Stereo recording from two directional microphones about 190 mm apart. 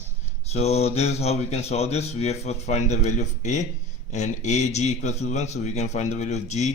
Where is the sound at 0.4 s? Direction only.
35° left (ahead or behind).